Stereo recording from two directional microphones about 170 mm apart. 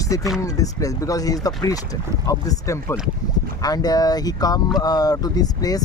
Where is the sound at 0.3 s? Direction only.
20° left (ahead or behind).